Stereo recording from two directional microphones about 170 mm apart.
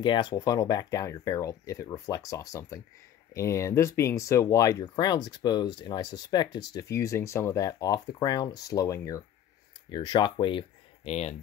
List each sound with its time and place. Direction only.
0.0 s speech: 25° left (ahead or behind)
11.1 s speech: 40° left (ahead or behind)